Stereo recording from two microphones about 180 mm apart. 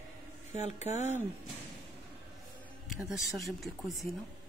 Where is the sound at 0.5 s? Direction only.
40° left (ahead or behind).